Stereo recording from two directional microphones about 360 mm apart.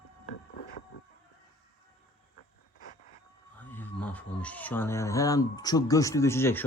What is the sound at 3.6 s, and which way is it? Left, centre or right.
Speech, centre.